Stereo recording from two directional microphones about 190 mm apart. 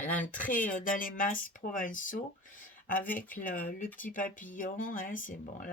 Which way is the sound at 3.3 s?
45° left (ahead or behind).